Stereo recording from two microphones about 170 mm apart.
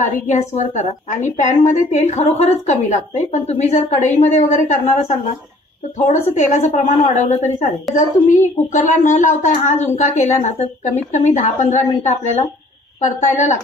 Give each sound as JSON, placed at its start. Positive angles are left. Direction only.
{"t": 0.0, "sound": "a woman's voice", "side_deg": 45}